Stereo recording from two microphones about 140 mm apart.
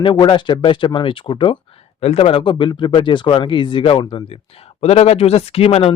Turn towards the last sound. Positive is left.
turn(degrees=45)  # may be behind; listen again after turning